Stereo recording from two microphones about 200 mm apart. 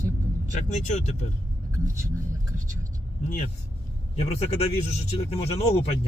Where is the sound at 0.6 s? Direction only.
35° left (ahead or behind).